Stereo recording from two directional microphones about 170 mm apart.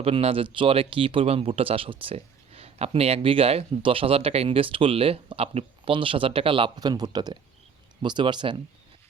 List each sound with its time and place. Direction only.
0.0 s speech: 35° right (ahead or behind)